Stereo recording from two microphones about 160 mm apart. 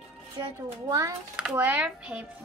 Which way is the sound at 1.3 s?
5° right (ahead or behind).